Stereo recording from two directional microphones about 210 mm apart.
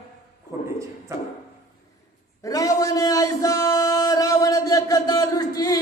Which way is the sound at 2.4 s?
15° left (ahead or behind).